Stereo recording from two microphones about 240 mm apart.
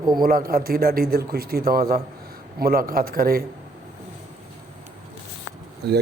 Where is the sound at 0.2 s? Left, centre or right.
Right.